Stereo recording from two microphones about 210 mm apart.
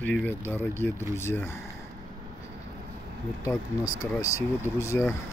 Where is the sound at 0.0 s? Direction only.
10° left (ahead or behind).